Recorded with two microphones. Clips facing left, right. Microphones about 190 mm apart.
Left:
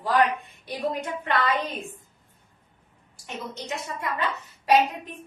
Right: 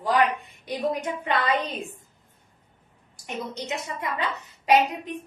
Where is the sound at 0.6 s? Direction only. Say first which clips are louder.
Right 2 dB; 15° right (ahead or behind).